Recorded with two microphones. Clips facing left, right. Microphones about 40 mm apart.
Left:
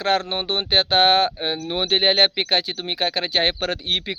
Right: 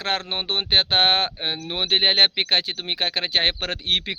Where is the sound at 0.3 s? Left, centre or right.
Right.